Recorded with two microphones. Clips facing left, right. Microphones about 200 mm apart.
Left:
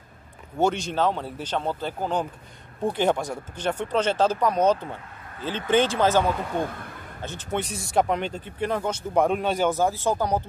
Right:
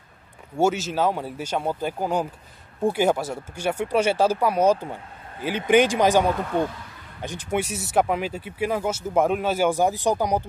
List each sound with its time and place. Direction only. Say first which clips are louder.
0.6 s speech: right 1 dB; 5° right (ahead or behind)
6.7 s speech: left 3 dB; 55° left (ahead or behind)
7.2 s speech: right 3 dB; 15° right (ahead or behind)